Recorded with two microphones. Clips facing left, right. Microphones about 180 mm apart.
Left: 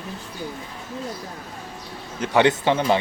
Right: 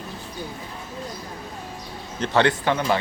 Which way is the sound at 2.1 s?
10° left (ahead or behind).